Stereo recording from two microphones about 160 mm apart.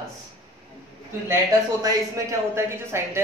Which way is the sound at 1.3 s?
25° right (ahead or behind).